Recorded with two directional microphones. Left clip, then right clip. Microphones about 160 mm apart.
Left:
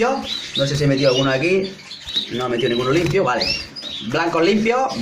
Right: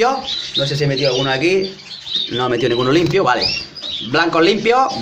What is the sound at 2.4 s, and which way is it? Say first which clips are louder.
Speech: right 4 dB; 20° right (ahead or behind).